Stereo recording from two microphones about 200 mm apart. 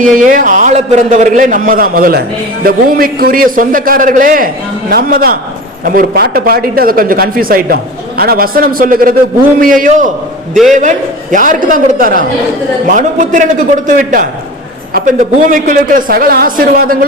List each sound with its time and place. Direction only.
0.0 s a man's voice: 40° right (ahead or behind)